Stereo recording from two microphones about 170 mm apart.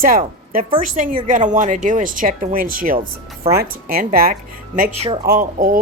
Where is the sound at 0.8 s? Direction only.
50° right (ahead or behind).